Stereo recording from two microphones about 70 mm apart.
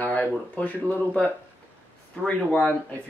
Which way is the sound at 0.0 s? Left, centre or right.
Left.